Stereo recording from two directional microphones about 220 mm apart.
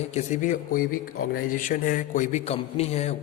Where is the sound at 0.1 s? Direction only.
30° left (ahead or behind).